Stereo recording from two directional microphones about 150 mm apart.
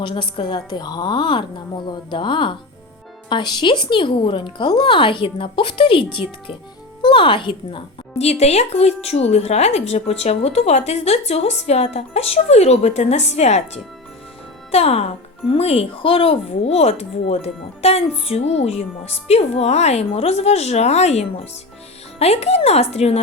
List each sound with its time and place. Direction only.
0.0 s speech: 35° left (ahead or behind)
8.2 s speech: 45° left (ahead or behind)
14.7 s speech: 45° left (ahead or behind)